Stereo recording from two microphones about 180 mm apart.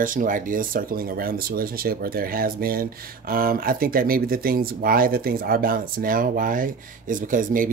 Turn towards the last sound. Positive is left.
turn(degrees=-50)  # may be behind; listen again after turning